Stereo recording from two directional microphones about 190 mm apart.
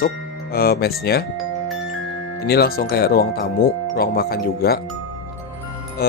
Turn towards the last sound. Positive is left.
turn(degrees=50)  # may be behind; listen again after turning